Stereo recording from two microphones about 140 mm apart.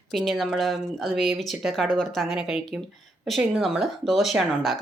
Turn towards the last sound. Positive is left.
turn(degrees=0)  # may be behind; listen again after turning